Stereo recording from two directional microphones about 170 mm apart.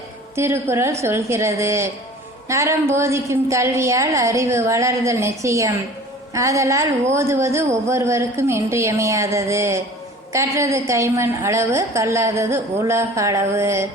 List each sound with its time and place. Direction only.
0.3 s a woman's voice: 15° right (ahead or behind)